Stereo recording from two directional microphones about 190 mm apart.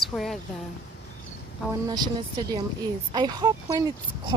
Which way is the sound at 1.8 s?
20° right (ahead or behind).